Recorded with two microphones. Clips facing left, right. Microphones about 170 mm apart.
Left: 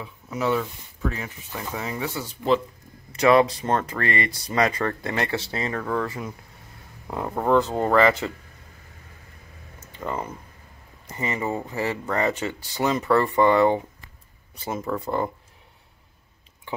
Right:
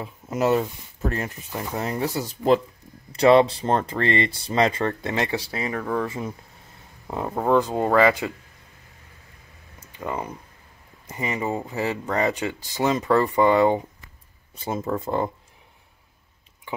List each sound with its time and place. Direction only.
0.0 s speech: 45° right (ahead or behind)
1.8 s speech: 40° right (ahead or behind); by 8.3 s 15° right (ahead or behind)
9.9 s speech: 15° right (ahead or behind)